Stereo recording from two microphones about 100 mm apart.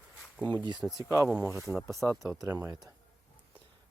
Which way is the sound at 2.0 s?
10° left (ahead or behind).